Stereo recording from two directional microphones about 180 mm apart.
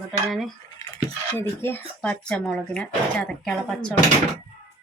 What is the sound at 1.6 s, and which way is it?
Speech, 10° left (ahead or behind).